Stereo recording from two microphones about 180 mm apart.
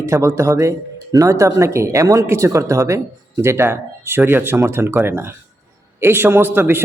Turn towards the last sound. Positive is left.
turn(degrees=-15)  # may be behind; listen again after turning